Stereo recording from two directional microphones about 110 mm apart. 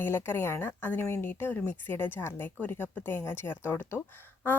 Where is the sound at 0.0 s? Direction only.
20° left (ahead or behind).